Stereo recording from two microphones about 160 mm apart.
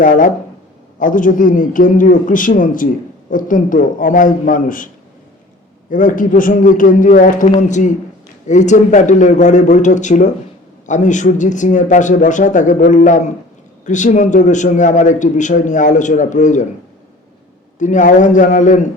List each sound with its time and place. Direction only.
0.0 s a man's voice: 55° left (ahead or behind)
5.9 s a man's voice: 55° left (ahead or behind)
17.7 s a man's voice: 50° left (ahead or behind)